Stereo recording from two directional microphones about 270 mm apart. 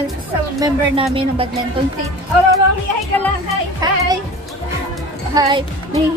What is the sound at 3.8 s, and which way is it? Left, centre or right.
Speech, centre.